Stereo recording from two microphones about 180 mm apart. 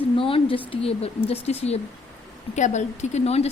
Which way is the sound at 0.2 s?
30° left (ahead or behind).